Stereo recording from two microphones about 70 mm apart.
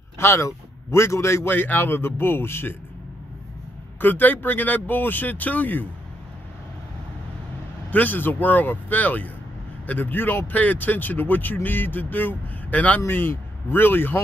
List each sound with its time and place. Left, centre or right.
0.2 s a man's voice: left
1.5 s speech: left
4.0 s speech: left
7.9 s speech: left